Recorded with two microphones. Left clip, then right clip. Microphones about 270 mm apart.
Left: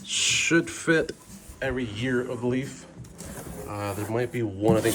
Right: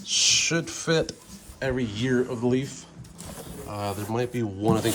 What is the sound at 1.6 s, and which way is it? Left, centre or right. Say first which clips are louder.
Speech: right 1 dB; right.